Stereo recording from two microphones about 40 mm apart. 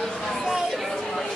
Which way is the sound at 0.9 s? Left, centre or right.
Centre.